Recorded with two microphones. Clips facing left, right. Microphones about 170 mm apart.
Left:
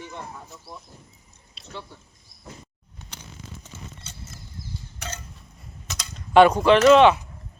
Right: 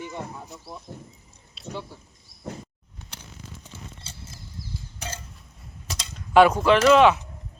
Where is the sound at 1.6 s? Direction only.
Centre (ahead or behind).